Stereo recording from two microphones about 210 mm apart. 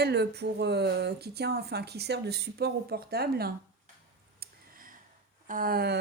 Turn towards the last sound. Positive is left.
turn(degrees=-50)  # may be behind; listen again after turning